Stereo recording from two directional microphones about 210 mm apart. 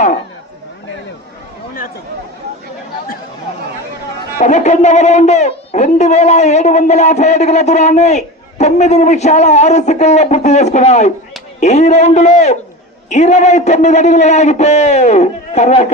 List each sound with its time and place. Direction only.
4.4 s speech: 35° left (ahead or behind)